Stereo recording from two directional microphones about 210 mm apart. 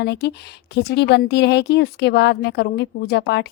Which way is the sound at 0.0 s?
55° left (ahead or behind).